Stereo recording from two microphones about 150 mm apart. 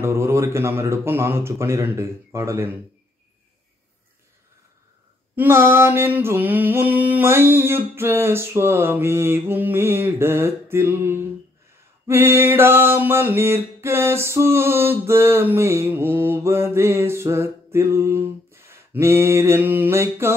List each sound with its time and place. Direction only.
0.0 s mantra: 20° right (ahead or behind)
5.3 s mantra: 15° right (ahead or behind)